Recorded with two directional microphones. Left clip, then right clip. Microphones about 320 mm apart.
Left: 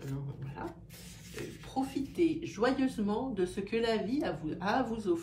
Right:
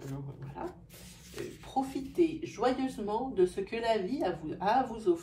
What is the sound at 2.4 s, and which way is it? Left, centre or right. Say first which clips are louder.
Speech: even; centre.